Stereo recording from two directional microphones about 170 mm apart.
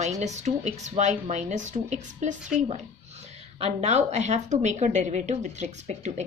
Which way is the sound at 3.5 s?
40° right (ahead or behind).